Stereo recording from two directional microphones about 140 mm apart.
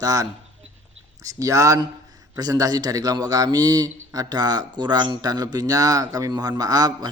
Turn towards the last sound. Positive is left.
turn(degrees=-25)  # may be behind; listen again after turning